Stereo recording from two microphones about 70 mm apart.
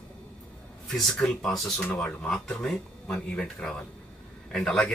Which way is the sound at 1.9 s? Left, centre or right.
Left.